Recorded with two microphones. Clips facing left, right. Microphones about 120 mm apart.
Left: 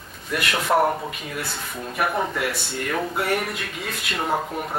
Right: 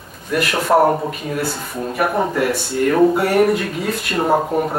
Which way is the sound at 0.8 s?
30° right (ahead or behind).